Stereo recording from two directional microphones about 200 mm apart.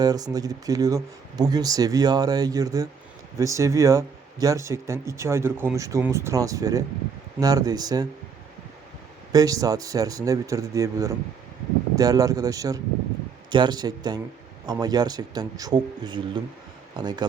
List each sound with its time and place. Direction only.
0.0 s speech: 20° right (ahead or behind)
9.3 s speech: 15° right (ahead or behind)